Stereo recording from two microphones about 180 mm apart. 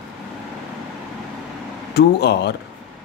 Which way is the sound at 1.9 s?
65° left (ahead or behind).